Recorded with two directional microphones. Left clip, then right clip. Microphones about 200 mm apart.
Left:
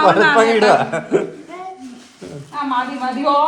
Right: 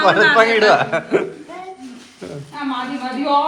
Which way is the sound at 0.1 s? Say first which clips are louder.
Even; 10° left (ahead or behind).